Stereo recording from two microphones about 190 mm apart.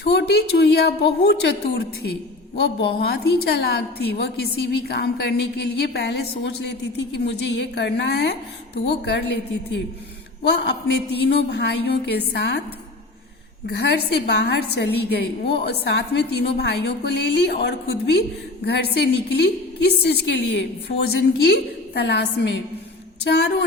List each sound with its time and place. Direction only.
0.0 s a woman's voice: 60° left (ahead or behind)
13.7 s a woman's voice: 60° left (ahead or behind)